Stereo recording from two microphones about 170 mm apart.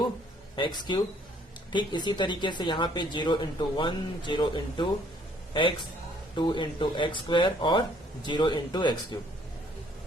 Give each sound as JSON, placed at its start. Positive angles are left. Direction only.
{"t": 0.5, "sound": "speech", "side_deg": 25}
{"t": 6.3, "sound": "speech", "side_deg": 30}